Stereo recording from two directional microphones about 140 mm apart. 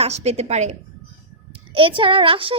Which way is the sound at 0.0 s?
50° right (ahead or behind).